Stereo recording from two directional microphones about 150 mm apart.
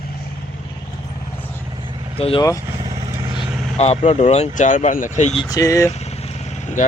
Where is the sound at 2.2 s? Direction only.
40° left (ahead or behind).